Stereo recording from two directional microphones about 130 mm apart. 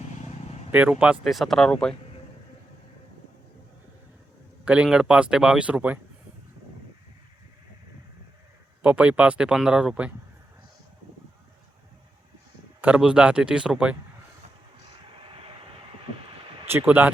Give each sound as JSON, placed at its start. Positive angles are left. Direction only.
{"t": 0.2, "sound": "vehicle", "side_deg": 55}
{"t": 0.7, "sound": "speech", "side_deg": -10}
{"t": 4.6, "sound": "speech", "side_deg": -10}
{"t": 8.8, "sound": "speech", "side_deg": -10}
{"t": 12.8, "sound": "speech", "side_deg": -10}
{"t": 15.2, "sound": "vehicle", "side_deg": -45}
{"t": 16.6, "sound": "speech", "side_deg": -15}